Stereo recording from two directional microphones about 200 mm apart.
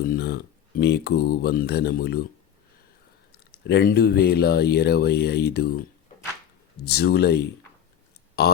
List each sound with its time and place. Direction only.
0.0 s speech: 50° left (ahead or behind)
3.5 s speech: 55° left (ahead or behind)
6.8 s speech: 55° left (ahead or behind)